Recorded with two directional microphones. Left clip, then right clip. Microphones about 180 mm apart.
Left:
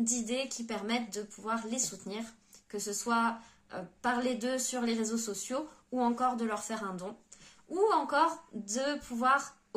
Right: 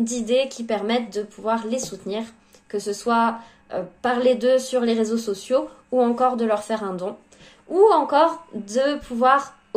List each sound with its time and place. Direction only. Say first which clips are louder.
0.0 s speech: right 13 dB; 20° left (ahead or behind)